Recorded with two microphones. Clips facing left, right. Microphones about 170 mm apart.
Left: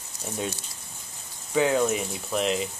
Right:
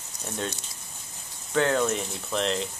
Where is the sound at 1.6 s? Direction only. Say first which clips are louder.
Left 1 dB; 10° left (ahead or behind).